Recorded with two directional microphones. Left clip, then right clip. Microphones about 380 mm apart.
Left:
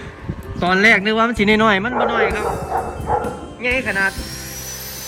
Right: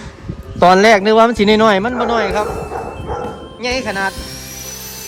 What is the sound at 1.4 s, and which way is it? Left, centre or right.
Speech, centre.